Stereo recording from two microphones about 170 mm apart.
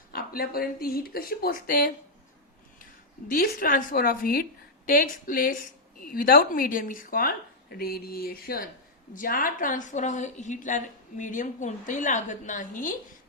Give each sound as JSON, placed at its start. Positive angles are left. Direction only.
{"t": 0.1, "sound": "a woman's voice", "side_deg": 60}
{"t": 3.2, "sound": "a woman's voice", "side_deg": 60}